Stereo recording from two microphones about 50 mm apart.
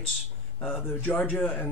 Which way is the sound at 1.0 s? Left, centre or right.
Left.